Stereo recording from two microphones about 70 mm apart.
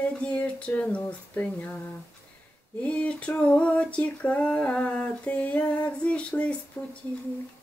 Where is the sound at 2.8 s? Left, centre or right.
Centre.